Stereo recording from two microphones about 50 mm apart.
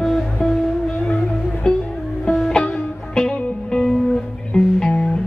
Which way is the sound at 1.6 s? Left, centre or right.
Centre.